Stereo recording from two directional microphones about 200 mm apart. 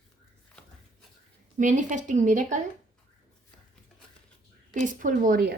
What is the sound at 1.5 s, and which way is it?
A woman's voice, 40° right (ahead or behind).